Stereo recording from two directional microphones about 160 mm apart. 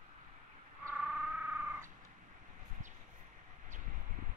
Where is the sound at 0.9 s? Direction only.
5° right (ahead or behind).